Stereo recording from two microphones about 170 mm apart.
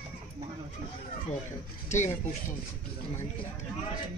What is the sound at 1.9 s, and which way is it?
Speech, 45° left (ahead or behind).